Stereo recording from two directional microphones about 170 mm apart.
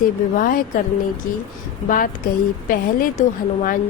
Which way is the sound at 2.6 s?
50° left (ahead or behind).